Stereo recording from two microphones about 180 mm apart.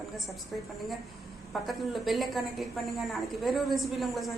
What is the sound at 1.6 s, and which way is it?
A woman's voice, centre (ahead or behind).